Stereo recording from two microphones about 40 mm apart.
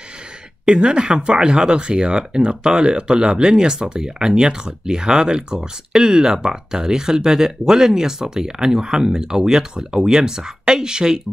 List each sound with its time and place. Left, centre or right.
0.7 s speech: right